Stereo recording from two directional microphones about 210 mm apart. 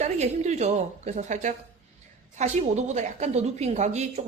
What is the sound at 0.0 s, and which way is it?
A woman's voice, 35° right (ahead or behind).